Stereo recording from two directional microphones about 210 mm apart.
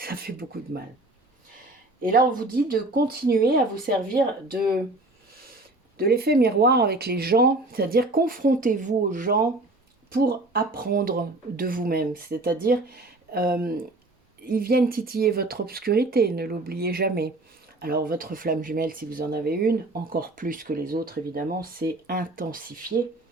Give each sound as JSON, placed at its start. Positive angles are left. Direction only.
{"t": 0.0, "sound": "a sound", "side_deg": -45}
{"t": 2.0, "sound": "speech", "side_deg": -40}
{"t": 6.0, "sound": "speech", "side_deg": -45}